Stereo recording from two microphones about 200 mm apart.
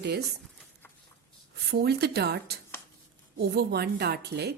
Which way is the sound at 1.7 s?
50° right (ahead or behind).